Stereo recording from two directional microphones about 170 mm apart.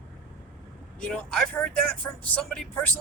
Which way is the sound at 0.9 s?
5° left (ahead or behind).